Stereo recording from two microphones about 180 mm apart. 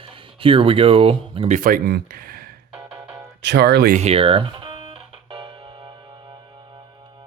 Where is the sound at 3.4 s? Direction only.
70° right (ahead or behind).